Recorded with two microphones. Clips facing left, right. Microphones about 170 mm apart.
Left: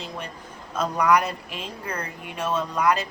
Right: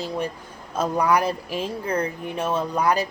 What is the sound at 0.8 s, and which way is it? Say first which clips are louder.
Speech: right 1 dB; 30° right (ahead or behind).